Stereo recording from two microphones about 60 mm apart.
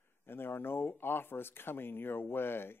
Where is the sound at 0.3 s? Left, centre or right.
Left.